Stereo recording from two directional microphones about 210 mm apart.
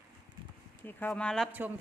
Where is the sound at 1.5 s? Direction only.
10° right (ahead or behind).